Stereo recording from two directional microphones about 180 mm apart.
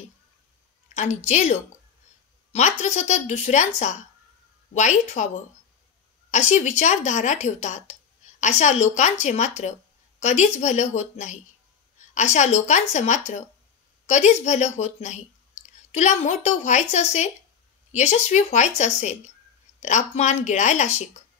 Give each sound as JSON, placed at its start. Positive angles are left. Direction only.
{"t": 0.9, "sound": "a woman's voice", "side_deg": 40}